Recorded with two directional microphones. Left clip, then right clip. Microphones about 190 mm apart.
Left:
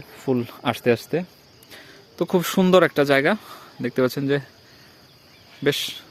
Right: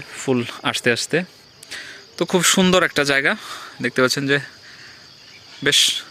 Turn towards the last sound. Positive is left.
turn(degrees=5)  # may be behind; listen again after turning